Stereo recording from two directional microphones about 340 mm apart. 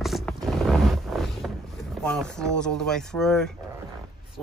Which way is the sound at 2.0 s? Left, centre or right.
Centre.